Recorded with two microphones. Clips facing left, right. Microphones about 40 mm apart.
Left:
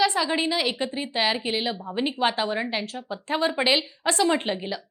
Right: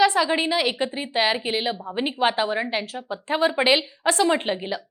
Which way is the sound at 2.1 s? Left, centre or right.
Right.